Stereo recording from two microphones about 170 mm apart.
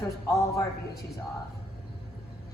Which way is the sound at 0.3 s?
20° left (ahead or behind).